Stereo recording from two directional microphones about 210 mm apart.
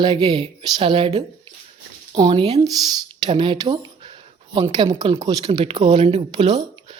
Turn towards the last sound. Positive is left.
turn(degrees=-25)  # may be behind; listen again after turning